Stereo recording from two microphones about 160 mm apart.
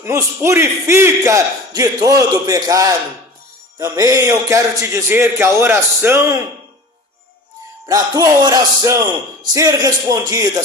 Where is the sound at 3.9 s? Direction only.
20° right (ahead or behind).